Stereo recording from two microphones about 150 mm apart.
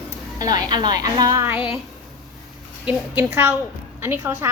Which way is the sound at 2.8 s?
15° right (ahead or behind).